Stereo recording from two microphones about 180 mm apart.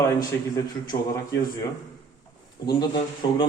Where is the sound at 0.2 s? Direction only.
20° left (ahead or behind).